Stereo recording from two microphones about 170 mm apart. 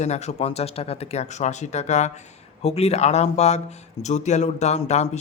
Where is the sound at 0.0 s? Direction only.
40° left (ahead or behind).